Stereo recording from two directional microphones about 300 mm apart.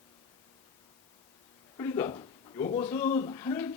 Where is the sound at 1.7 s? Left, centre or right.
Centre.